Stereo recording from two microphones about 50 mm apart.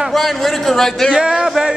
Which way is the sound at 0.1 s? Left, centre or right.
Centre.